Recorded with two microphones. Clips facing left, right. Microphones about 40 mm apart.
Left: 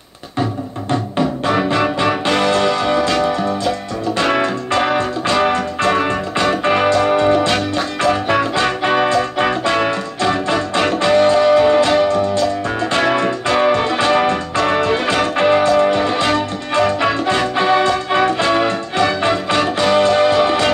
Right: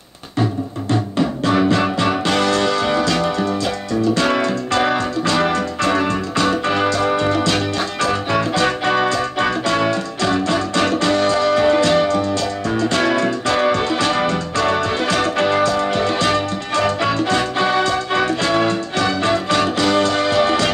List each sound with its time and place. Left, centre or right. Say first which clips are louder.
1.1 s music: left 1 dB; left
4.1 s music: left 3 dB; left